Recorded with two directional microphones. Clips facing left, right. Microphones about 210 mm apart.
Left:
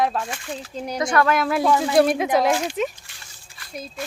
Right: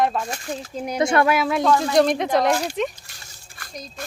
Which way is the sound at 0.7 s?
10° right (ahead or behind).